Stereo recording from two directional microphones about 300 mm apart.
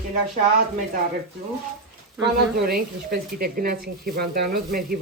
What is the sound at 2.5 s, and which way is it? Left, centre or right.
Speech, right.